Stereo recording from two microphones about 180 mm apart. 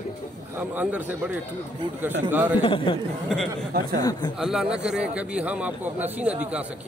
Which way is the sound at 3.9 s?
20° left (ahead or behind).